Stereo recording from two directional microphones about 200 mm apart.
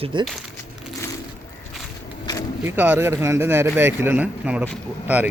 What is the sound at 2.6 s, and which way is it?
Speech, 10° right (ahead or behind).